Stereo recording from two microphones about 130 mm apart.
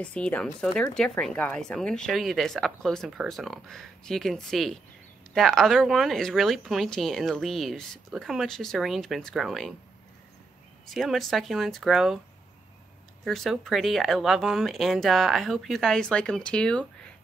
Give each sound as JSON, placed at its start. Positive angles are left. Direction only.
{"t": 0.0, "sound": "speech", "side_deg": 10}
{"t": 10.9, "sound": "speech", "side_deg": 0}
{"t": 13.2, "sound": "speech", "side_deg": 0}